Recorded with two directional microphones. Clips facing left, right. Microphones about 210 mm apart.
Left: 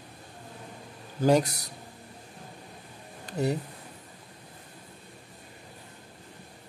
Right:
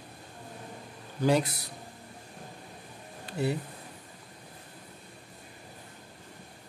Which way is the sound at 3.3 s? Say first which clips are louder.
Left 2 dB; 40° left (ahead or behind).